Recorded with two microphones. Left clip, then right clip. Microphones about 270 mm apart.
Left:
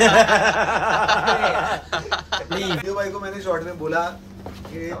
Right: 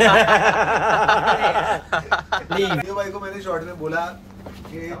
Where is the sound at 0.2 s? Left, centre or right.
Right.